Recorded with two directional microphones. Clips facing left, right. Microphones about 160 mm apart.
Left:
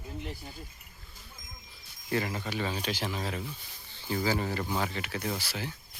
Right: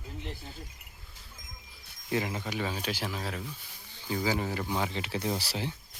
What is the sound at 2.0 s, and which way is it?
Speech, 15° right (ahead or behind).